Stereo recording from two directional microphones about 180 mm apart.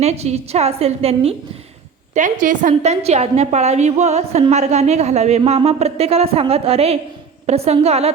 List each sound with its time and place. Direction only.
0.0 s a woman's voice: 35° right (ahead or behind)
2.1 s a woman's voice: 45° right (ahead or behind)